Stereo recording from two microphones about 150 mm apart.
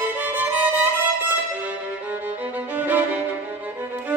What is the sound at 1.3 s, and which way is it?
Violin, 10° right (ahead or behind).